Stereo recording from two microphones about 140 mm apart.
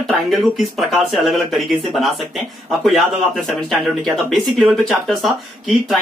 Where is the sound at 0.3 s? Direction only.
Centre (ahead or behind).